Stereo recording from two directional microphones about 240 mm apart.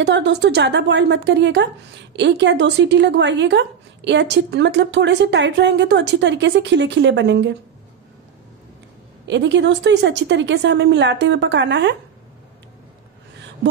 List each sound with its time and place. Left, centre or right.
0.0 s speech: right
9.2 s speech: right